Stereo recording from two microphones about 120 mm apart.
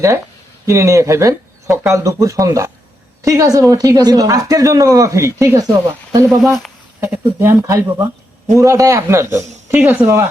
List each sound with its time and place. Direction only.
0.6 s speech: 25° right (ahead or behind)